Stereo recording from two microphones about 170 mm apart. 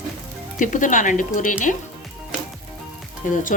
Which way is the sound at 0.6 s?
50° left (ahead or behind).